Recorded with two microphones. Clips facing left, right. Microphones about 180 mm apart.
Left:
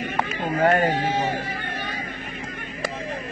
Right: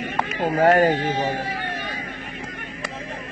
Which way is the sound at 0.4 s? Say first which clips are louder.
Right 4 dB; 55° right (ahead or behind).